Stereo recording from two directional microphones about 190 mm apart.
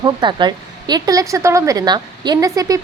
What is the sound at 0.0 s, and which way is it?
A woman's voice, 25° right (ahead or behind).